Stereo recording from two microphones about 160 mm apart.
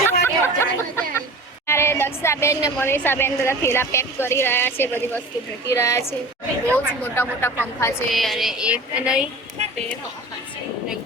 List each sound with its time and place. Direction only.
0.0 s chatter: 15° left (ahead or behind)
1.6 s a sound: 15° left (ahead or behind)
2.7 s speech: 15° left (ahead or behind)
8.1 s a woman's voice: centre (ahead or behind)